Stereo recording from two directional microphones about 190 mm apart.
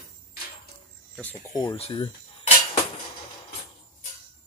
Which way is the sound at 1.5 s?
20° left (ahead or behind).